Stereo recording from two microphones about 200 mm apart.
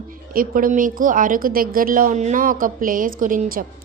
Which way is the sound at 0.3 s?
45° right (ahead or behind).